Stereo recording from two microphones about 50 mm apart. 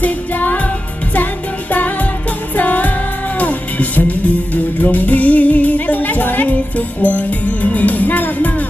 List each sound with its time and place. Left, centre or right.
0.0 s music: left
1.7 s music: left